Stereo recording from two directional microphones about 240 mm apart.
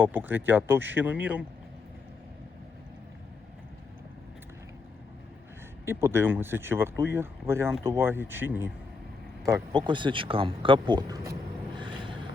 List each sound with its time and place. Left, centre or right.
0.0 s speech: centre
5.8 s speech: centre
11.8 s a sound: centre